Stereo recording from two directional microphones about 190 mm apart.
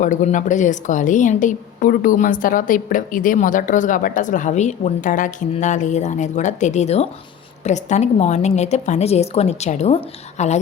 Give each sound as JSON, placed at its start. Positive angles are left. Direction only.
{"t": 0.0, "sound": "a woman's voice", "side_deg": 40}